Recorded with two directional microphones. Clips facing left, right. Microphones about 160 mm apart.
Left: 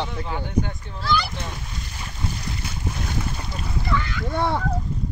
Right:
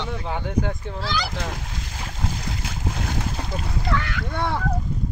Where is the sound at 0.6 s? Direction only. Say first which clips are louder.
Right 3 dB; 90° right.